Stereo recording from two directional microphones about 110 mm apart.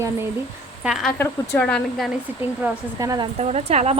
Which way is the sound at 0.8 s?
5° right (ahead or behind).